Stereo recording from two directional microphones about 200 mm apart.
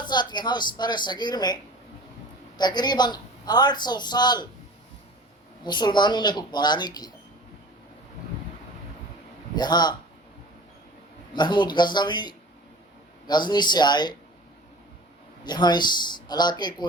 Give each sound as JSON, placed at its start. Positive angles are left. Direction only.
{"t": 0.0, "sound": "a man's voice", "side_deg": 20}
{"t": 2.6, "sound": "a man's voice", "side_deg": 20}
{"t": 5.6, "sound": "a man's voice", "side_deg": 20}
{"t": 9.6, "sound": "a man's voice", "side_deg": 20}
{"t": 11.3, "sound": "a man's voice", "side_deg": 25}
{"t": 15.4, "sound": "a man's voice", "side_deg": 20}